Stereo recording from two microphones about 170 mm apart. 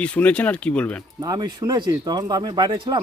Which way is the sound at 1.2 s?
20° right (ahead or behind).